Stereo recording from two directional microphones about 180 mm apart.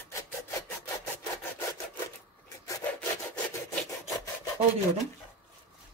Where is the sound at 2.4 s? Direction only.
20° left (ahead or behind).